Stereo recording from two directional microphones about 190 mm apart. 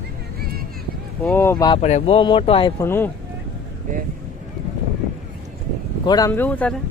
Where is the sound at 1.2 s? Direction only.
10° left (ahead or behind).